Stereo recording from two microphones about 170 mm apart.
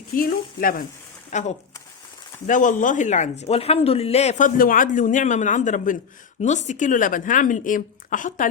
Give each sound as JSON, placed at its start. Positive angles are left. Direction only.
{"t": 0.1, "sound": "speech", "side_deg": 60}
{"t": 1.3, "sound": "speech", "side_deg": 45}